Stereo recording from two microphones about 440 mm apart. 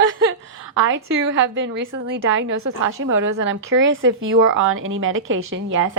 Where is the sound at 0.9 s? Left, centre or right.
Right.